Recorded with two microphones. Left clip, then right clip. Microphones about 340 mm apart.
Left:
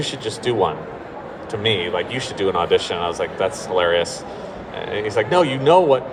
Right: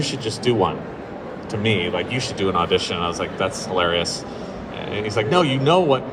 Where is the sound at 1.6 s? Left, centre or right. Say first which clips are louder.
Left 1 dB; left.